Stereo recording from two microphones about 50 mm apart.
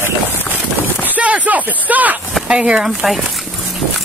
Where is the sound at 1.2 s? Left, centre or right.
Right.